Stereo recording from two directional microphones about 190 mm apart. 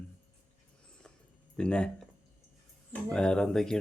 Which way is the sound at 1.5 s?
5° left (ahead or behind).